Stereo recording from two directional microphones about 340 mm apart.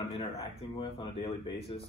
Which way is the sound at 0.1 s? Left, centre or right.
Centre.